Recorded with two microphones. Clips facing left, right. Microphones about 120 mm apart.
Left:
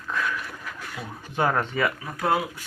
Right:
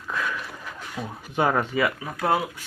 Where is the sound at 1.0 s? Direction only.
30° right (ahead or behind).